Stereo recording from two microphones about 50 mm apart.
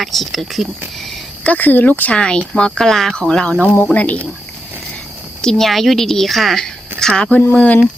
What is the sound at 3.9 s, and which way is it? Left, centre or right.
Speech, left.